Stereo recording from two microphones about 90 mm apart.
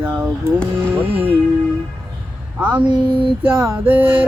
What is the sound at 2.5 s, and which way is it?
Speech, 15° right (ahead or behind).